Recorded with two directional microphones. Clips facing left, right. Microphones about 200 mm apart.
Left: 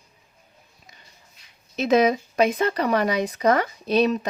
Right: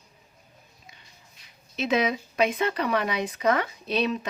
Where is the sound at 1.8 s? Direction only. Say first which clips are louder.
Left 6 dB; 40° left (ahead or behind).